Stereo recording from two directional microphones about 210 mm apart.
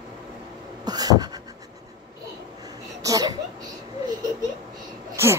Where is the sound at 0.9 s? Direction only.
20° right (ahead or behind).